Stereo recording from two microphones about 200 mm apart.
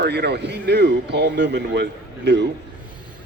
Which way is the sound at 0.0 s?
55° right (ahead or behind).